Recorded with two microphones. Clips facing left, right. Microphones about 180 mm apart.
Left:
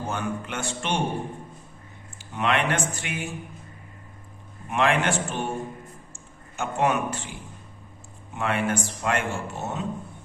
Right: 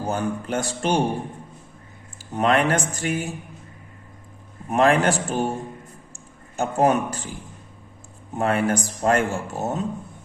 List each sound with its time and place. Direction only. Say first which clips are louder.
0.0 s speech: right 4 dB; 40° right (ahead or behind)
2.3 s speech: right 5 dB; 40° right (ahead or behind)
4.7 s speech: right 5 dB; 40° right (ahead or behind)